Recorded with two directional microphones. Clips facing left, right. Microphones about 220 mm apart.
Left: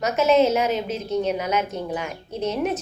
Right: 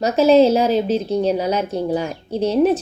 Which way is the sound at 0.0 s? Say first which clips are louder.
Right 6 dB; 30° right (ahead or behind).